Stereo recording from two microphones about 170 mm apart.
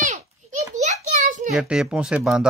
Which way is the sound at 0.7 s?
45° right (ahead or behind).